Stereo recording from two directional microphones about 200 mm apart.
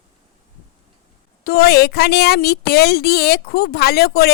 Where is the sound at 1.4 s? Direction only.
50° left (ahead or behind).